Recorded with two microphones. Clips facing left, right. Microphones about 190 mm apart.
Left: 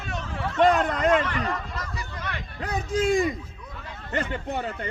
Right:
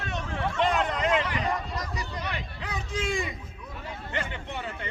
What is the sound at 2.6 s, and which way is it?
A man's voice, 45° left (ahead or behind).